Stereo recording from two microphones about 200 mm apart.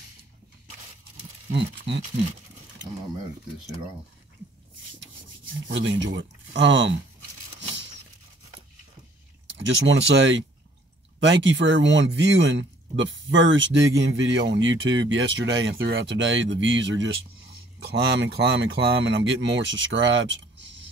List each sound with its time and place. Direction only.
1.9 s speech: 60° right (ahead or behind)
5.7 s speech: 65° right (ahead or behind)
9.5 s speech: 70° right (ahead or behind)
17.7 s speech: 55° right (ahead or behind)